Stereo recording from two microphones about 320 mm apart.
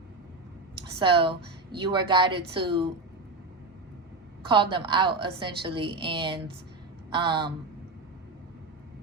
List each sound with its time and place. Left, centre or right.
0.9 s a woman's voice: centre
4.4 s a woman's voice: centre